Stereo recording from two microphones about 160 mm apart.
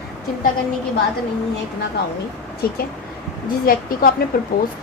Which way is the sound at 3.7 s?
65° left (ahead or behind).